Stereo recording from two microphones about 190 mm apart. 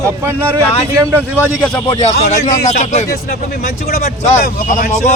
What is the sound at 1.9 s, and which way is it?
Speech, 35° left (ahead or behind).